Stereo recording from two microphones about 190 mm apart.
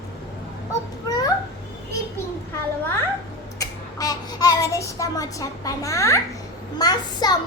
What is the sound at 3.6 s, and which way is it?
Child singing, 20° left (ahead or behind).